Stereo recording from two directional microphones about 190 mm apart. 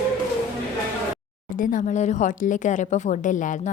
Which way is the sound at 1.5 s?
45° left (ahead or behind).